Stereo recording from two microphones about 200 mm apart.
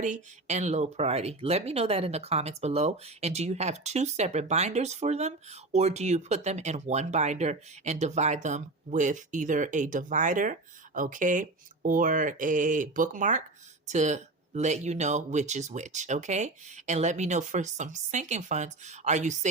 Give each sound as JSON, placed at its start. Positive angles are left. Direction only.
{"t": 0.0, "sound": "speech", "side_deg": -35}